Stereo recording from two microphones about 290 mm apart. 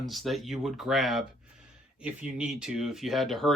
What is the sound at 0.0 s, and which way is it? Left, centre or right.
Speech, centre.